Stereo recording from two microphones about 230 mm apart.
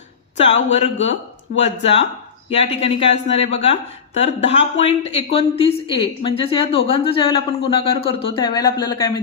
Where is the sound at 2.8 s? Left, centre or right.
Left.